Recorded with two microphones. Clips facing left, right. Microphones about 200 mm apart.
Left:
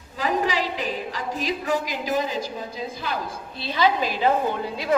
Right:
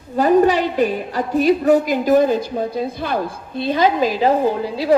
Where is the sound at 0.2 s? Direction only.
55° right (ahead or behind).